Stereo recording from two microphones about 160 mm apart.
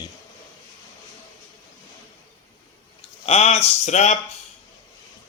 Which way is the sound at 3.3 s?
45° left (ahead or behind).